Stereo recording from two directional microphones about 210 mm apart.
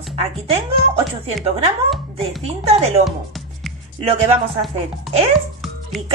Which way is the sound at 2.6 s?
30° right (ahead or behind).